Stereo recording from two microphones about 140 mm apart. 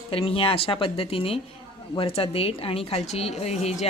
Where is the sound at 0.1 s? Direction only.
40° left (ahead or behind).